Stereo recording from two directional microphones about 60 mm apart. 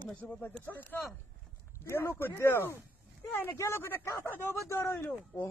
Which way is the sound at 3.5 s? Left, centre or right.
Left.